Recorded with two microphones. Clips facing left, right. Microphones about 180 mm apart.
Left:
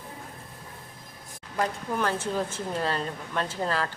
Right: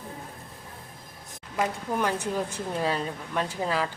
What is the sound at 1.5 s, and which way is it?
A woman's voice, 10° right (ahead or behind).